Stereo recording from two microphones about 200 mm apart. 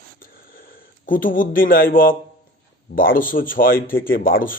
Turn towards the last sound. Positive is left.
turn(degrees=45)  # may be behind; listen again after turning